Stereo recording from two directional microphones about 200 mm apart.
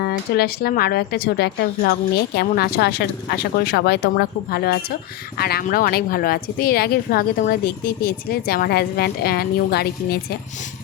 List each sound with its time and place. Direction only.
0.0 s a woman's voice: 50° left (ahead or behind)